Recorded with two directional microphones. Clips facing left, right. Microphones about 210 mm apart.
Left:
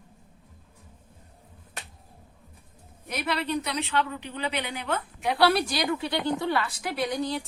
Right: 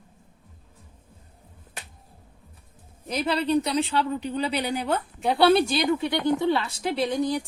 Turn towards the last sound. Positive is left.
turn(degrees=-15)  # may be behind; listen again after turning